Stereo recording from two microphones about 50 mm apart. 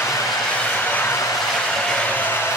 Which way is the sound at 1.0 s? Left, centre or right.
Left.